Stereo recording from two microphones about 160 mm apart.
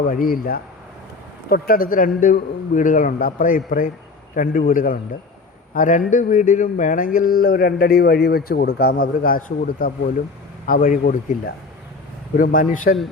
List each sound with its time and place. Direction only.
0.1 s a man's voice: 65° left (ahead or behind)